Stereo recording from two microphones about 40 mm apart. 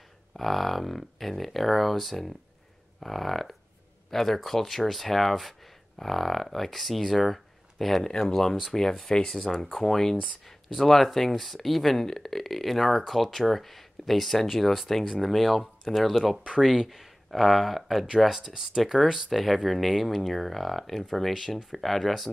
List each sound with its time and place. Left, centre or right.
0.4 s speech: centre
18.5 s speech: centre
18.8 s speech: centre
19.3 s speech: centre